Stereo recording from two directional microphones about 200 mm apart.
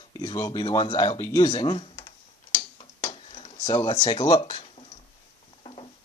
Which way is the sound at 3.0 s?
25° left (ahead or behind).